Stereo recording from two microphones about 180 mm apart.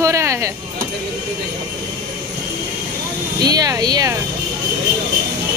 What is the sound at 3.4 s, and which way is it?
Speech, 20° right (ahead or behind).